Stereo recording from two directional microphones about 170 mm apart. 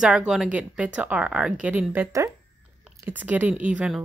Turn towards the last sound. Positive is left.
turn(degrees=-5)  # may be behind; listen again after turning